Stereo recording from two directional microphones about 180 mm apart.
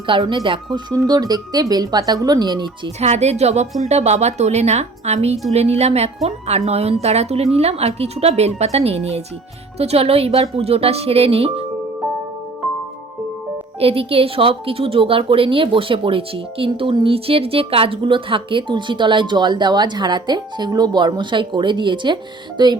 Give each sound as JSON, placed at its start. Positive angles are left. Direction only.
{"t": 0.1, "sound": "a woman's voice", "side_deg": -30}
{"t": 3.0, "sound": "a woman's voice", "side_deg": -35}
{"t": 13.7, "sound": "a woman's voice", "side_deg": -30}